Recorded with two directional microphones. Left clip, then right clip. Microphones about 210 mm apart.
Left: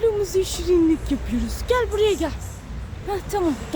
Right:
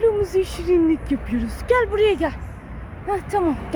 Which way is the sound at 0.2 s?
5° left (ahead or behind).